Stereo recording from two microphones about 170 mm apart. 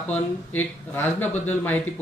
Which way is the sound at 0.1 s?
10° left (ahead or behind).